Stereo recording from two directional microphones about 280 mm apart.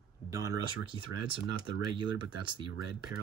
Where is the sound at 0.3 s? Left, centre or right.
Centre.